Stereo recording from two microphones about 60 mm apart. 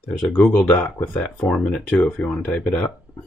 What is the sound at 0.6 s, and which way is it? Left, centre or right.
Speech, left.